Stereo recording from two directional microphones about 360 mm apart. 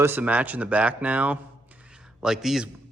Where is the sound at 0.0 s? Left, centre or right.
Centre.